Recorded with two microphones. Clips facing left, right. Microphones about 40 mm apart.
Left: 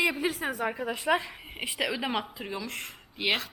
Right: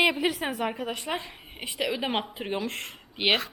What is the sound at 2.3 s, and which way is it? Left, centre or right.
A woman's voice, right.